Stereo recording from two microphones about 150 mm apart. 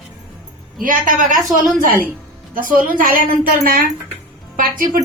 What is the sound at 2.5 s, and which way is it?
A woman's voice, 65° right (ahead or behind).